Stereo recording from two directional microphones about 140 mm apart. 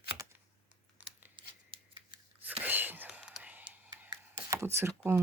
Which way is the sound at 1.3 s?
35° right (ahead or behind).